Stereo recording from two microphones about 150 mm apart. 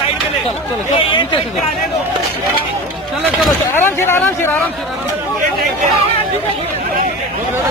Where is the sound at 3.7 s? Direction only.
15° left (ahead or behind).